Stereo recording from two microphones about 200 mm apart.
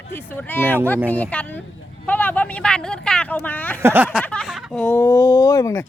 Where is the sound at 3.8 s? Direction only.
10° right (ahead or behind).